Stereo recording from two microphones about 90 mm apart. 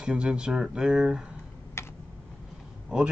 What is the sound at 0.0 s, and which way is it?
Speech, 10° right (ahead or behind).